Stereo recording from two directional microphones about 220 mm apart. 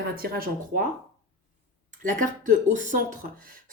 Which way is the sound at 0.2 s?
40° right (ahead or behind).